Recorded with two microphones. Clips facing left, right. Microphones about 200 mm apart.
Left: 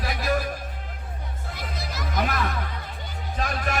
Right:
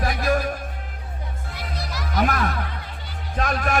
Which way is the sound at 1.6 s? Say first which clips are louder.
Right 2 dB; 45° left (ahead or behind).